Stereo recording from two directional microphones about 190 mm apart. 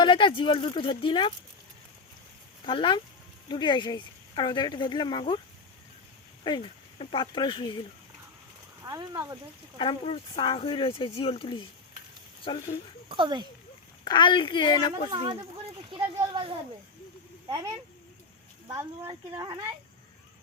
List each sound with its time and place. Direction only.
0.0 s speech: 25° left (ahead or behind)
2.6 s speech: 25° left (ahead or behind)
6.4 s speech: 25° left (ahead or behind)
8.8 s speech: 20° right (ahead or behind)
9.7 s speech: 25° left (ahead or behind)
13.1 s speech: 25° right (ahead or behind)
14.0 s speech: 25° left (ahead or behind)
15.1 s speech: 25° right (ahead or behind)
18.7 s speech: 15° right (ahead or behind)